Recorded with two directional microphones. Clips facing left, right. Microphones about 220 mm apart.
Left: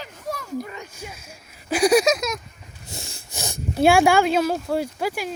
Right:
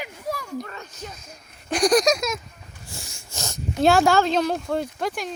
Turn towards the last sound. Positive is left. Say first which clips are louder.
# left 2 dB
turn(degrees=5)  # may be behind; listen again after turning